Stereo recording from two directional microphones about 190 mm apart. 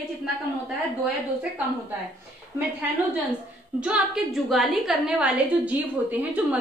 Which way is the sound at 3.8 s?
5° right (ahead or behind).